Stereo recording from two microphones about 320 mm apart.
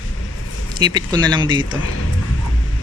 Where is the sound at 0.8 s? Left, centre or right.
Centre.